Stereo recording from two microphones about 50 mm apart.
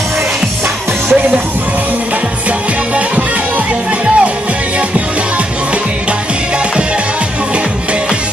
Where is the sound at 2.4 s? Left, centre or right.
Right.